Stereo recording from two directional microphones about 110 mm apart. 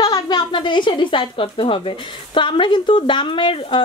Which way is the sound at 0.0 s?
40° left (ahead or behind).